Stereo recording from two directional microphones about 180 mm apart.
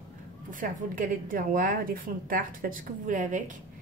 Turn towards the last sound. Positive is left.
turn(degrees=-45)  # may be behind; listen again after turning